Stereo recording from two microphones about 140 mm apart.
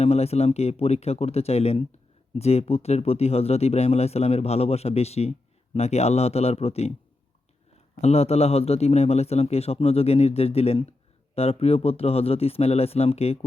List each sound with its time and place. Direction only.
0.0 s speech: 45° left (ahead or behind)
8.0 s speech: 50° left (ahead or behind)